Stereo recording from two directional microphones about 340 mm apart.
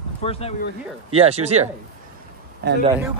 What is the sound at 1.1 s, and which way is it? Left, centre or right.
Speech, centre.